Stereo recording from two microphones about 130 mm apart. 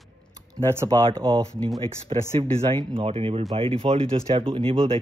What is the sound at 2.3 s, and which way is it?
Speech, 50° right (ahead or behind).